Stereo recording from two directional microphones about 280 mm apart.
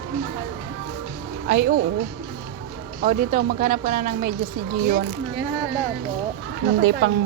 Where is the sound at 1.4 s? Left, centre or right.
Right.